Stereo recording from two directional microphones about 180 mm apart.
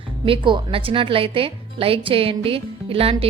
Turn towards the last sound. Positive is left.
turn(degrees=-30)  # may be behind; listen again after turning